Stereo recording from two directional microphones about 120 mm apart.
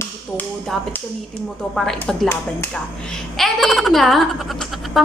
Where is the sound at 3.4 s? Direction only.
Centre (ahead or behind).